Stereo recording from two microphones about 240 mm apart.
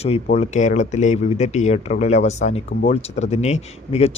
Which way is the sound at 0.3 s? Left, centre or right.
Left.